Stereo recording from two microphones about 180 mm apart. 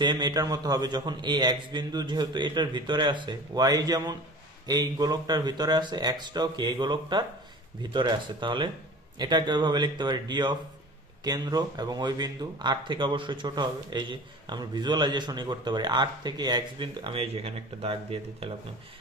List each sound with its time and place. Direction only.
0.0 s a man's voice: 25° right (ahead or behind)